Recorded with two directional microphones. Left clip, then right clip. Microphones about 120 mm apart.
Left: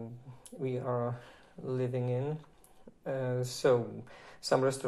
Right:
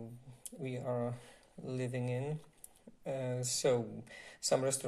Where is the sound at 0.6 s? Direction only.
45° right (ahead or behind).